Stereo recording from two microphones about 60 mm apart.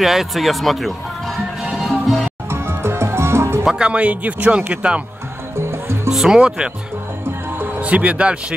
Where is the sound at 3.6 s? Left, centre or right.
Centre.